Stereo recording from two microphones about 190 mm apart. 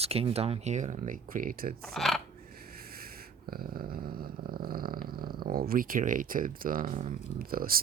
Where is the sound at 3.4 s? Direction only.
50° right (ahead or behind).